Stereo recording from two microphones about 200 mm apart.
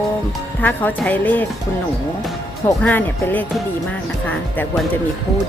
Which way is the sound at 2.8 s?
10° left (ahead or behind).